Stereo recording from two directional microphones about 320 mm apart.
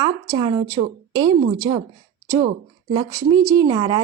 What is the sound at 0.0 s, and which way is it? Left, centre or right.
A woman's voice, centre.